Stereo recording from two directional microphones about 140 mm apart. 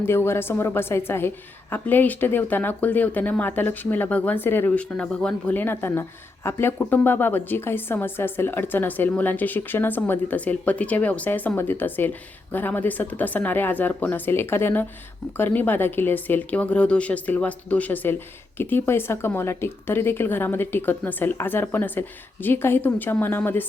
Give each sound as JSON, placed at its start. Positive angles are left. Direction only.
{"t": 0.0, "sound": "speech", "side_deg": 15}